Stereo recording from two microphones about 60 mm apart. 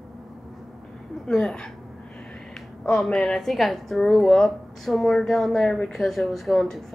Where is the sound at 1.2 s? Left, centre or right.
Centre.